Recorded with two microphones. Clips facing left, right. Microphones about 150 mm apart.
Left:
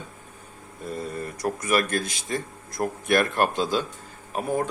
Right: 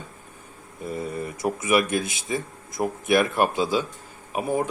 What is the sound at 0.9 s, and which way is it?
Speech, 10° right (ahead or behind).